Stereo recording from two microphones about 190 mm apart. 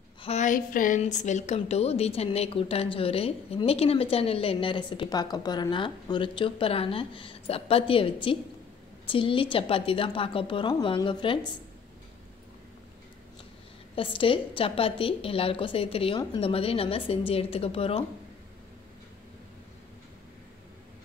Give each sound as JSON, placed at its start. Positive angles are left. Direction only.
{"t": 0.2, "sound": "a woman's voice", "side_deg": 35}
{"t": 13.9, "sound": "a woman's voice", "side_deg": 30}